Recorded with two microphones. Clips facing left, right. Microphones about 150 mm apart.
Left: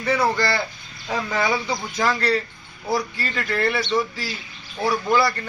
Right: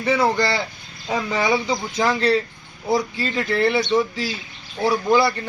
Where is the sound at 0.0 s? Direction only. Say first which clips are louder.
Right 2 dB; 20° right (ahead or behind).